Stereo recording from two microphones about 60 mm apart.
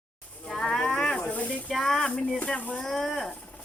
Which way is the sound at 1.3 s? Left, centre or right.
Left.